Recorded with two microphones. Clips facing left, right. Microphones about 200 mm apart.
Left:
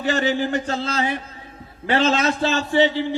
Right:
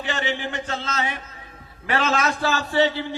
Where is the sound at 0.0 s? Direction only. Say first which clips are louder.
Left 6 dB; 40° left (ahead or behind).